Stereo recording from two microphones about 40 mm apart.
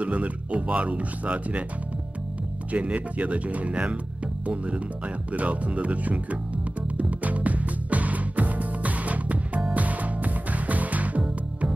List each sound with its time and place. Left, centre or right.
0.0 s speech: right
2.7 s speech: right
4.5 s music: right